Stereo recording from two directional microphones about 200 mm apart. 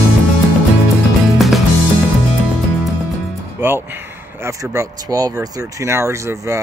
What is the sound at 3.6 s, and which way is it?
Speech, 10° right (ahead or behind).